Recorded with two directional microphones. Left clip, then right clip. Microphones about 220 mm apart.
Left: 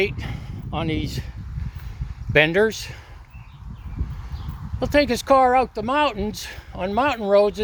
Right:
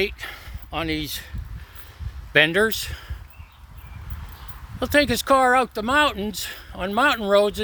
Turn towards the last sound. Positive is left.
turn(degrees=-20)  # may be behind; listen again after turning